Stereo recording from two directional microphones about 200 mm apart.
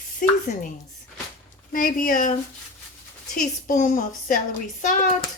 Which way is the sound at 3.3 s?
40° left (ahead or behind).